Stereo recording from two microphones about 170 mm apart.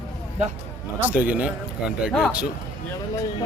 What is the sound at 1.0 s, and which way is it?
Speech, 10° right (ahead or behind).